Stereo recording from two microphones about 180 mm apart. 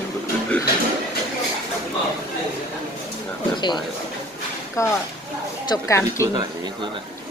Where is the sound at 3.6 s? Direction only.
25° left (ahead or behind).